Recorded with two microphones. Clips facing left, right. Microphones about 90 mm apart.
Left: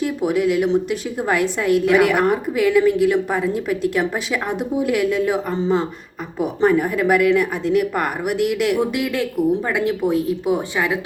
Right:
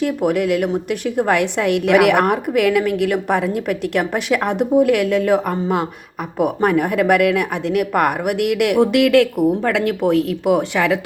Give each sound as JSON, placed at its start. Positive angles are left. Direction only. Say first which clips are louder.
{"t": 0.0, "sound": "a woman's voice", "louder": "right 1 dB", "side_deg": -55}